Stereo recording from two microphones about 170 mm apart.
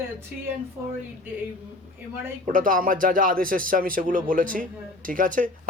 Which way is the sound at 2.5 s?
55° right (ahead or behind).